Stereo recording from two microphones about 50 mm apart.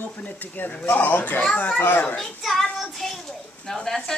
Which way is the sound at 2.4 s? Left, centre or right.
Centre.